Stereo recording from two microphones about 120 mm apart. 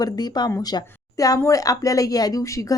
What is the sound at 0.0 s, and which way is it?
A woman's voice, 35° left (ahead or behind).